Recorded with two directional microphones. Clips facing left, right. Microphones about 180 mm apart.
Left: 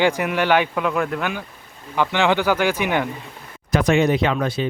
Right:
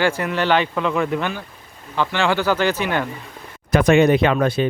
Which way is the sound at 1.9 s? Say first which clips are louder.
Left 1 dB; 15° left (ahead or behind).